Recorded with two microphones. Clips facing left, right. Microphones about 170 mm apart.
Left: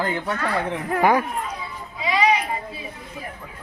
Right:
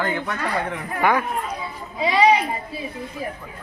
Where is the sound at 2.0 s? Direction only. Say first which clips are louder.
Right 3 dB; 30° right (ahead or behind).